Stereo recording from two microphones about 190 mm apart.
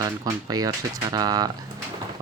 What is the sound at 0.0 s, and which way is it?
Speech, 20° right (ahead or behind).